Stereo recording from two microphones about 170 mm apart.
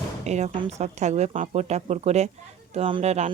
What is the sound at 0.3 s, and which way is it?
Speech, 40° right (ahead or behind).